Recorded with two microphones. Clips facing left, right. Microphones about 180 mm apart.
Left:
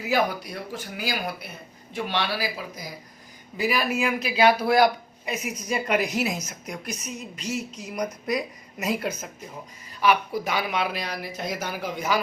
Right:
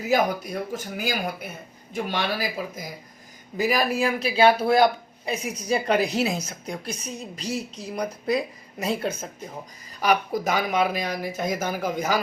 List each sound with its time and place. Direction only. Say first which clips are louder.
0.0 s a man's voice: right 2 dB; 45° right (ahead or behind); by 9.3 s 30° right (ahead or behind)
10.0 s speech: even; 40° right (ahead or behind)